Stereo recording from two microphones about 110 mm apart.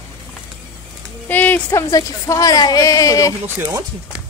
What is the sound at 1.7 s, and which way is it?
A woman's voice, 30° left (ahead or behind).